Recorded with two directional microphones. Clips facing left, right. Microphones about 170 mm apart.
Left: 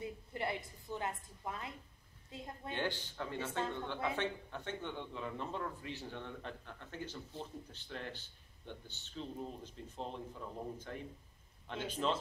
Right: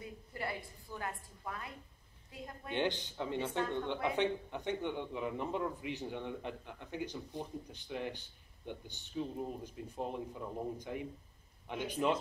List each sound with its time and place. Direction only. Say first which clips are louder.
0.0 s a sound: left 2 dB; 20° left (ahead or behind)
2.3 s a woman's voice: even; 25° left (ahead or behind)
2.7 s speech: right 5 dB; 20° right (ahead or behind)